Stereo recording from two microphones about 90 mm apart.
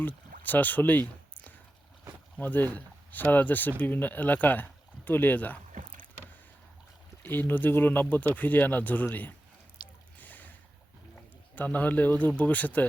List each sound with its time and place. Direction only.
0.0 s speech: 20° left (ahead or behind)
2.4 s speech: 20° left (ahead or behind)
7.2 s speech: 20° left (ahead or behind)
9.8 s a sound: 55° left (ahead or behind)
10.2 s boat: 20° left (ahead or behind)
11.5 s speech: 20° left (ahead or behind)